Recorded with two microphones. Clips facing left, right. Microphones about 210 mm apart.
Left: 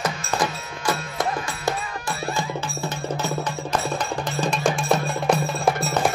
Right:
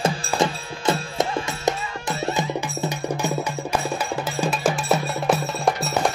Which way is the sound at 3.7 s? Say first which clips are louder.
Even; 10° right (ahead or behind).